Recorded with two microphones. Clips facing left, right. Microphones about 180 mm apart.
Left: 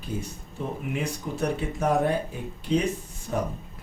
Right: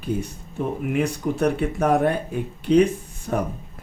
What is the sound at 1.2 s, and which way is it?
Speech, 65° right (ahead or behind).